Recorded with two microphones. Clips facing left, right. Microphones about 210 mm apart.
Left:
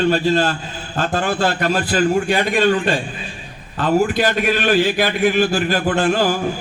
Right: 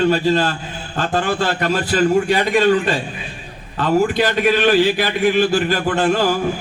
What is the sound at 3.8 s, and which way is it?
A man's voice, 50° left (ahead or behind).